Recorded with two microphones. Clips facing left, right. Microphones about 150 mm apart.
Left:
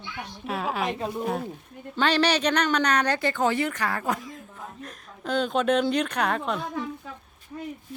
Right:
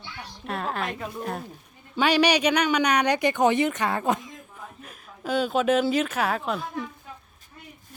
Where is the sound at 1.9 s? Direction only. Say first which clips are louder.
Right 2 dB; 10° right (ahead or behind).